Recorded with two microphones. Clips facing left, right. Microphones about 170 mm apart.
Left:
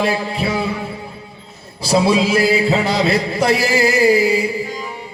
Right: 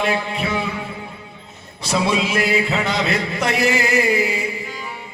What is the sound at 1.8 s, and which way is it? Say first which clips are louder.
Music: left 5 dB; 35° left (ahead or behind).